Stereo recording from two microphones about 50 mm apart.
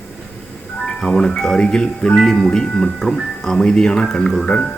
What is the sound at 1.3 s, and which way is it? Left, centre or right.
Speech, centre.